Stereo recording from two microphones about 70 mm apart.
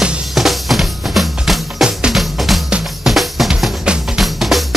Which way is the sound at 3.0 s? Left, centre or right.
Centre.